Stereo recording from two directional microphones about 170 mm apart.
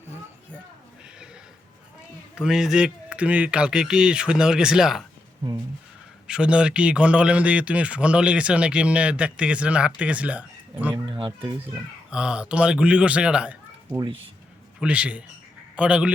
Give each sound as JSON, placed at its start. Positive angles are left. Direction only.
{"t": 2.3, "sound": "speech", "side_deg": -5}
{"t": 6.2, "sound": "speech", "side_deg": -5}
{"t": 10.9, "sound": "speech", "side_deg": -25}
{"t": 12.1, "sound": "speech", "side_deg": -5}
{"t": 14.8, "sound": "a man's voice", "side_deg": -5}